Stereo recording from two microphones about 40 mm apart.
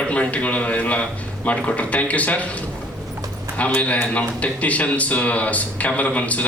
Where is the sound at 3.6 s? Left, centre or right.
Left.